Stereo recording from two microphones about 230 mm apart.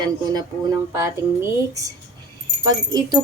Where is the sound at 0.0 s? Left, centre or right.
Centre.